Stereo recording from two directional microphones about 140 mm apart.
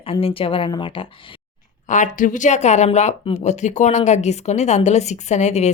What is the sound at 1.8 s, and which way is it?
Speech, 65° left (ahead or behind).